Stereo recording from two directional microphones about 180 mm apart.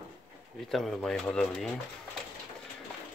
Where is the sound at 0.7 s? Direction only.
Centre (ahead or behind).